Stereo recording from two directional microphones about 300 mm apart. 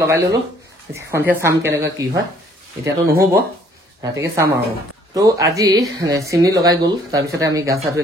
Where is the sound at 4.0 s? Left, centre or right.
Centre.